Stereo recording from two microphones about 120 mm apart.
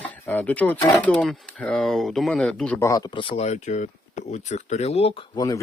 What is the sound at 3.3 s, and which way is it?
Speech, 70° left (ahead or behind).